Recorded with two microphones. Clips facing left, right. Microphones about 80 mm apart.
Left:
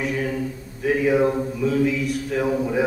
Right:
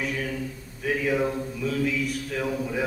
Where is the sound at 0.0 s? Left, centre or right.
Centre.